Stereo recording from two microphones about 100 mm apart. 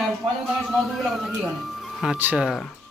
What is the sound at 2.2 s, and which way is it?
Speech, 15° right (ahead or behind).